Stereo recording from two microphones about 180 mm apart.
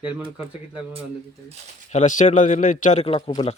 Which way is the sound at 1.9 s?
45° left (ahead or behind).